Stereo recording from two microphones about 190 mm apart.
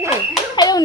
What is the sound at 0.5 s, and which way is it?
Speech, 20° left (ahead or behind).